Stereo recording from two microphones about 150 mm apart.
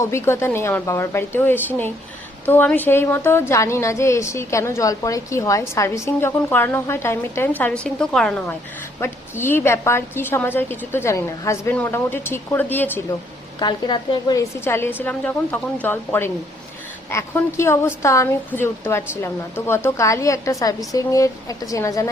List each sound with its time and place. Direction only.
0.0 s a woman's voice: 20° left (ahead or behind)
9.0 s a woman's voice: 15° left (ahead or behind)
13.6 s a woman's voice: 30° left (ahead or behind)